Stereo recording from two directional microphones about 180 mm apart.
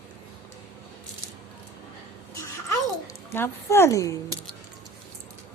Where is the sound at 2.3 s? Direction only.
15° left (ahead or behind).